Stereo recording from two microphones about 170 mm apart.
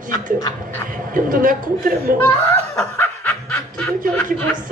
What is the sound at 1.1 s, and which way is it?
A man's voice, 55° right (ahead or behind).